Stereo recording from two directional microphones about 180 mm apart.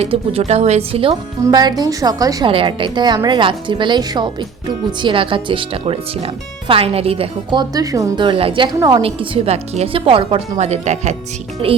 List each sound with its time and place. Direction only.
0.0 s a woman's voice: 35° right (ahead or behind)
1.5 s speech: 20° right (ahead or behind); by 11.2 s 40° right (ahead or behind)